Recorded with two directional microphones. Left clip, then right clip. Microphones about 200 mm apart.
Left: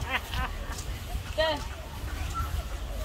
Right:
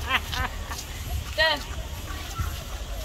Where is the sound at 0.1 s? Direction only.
40° right (ahead or behind).